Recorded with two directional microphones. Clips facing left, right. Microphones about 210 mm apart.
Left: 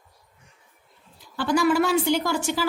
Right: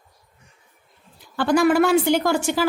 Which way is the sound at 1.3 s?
55° right (ahead or behind).